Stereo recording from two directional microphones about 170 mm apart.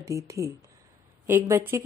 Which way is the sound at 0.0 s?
20° right (ahead or behind).